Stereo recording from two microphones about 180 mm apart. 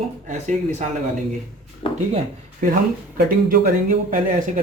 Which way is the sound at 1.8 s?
25° left (ahead or behind).